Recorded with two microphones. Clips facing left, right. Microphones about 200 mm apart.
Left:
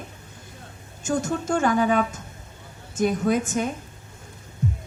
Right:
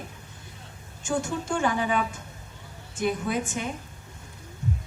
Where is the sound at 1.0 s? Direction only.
40° left (ahead or behind).